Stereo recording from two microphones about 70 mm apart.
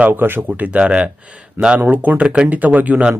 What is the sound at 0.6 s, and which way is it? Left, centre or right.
A man's voice, centre.